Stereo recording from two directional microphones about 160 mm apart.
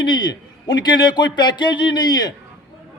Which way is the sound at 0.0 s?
25° left (ahead or behind).